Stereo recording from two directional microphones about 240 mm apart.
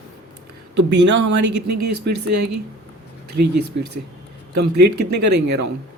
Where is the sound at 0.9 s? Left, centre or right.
Right.